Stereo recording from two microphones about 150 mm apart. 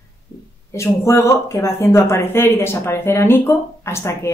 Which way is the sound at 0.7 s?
20° left (ahead or behind).